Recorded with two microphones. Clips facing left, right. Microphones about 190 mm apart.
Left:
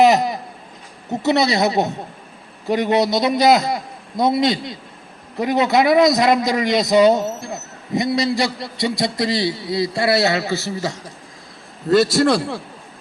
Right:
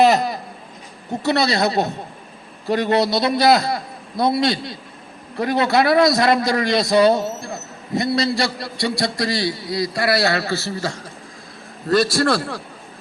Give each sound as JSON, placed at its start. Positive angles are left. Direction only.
{"t": 0.0, "sound": "a man's voice", "side_deg": 20}